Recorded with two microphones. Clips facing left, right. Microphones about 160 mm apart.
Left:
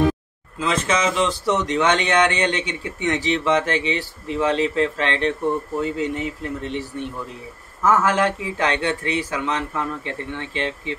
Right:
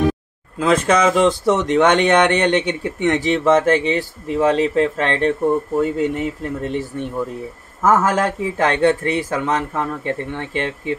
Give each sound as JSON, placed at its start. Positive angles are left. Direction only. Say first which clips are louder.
{"t": 0.6, "sound": "speech", "louder": "right 6 dB", "side_deg": -50}
{"t": 7.8, "sound": "speech", "louder": "right 2 dB", "side_deg": -45}